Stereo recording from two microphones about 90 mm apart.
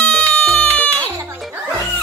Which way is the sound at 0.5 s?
15° left (ahead or behind).